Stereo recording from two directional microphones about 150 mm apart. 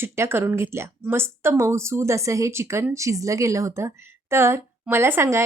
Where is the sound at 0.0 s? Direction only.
15° right (ahead or behind).